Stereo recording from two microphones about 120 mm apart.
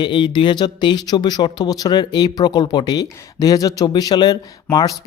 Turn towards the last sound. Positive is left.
turn(degrees=35)  # may be behind; listen again after turning